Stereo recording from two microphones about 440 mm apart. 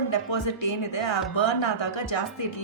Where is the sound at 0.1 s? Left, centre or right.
Left.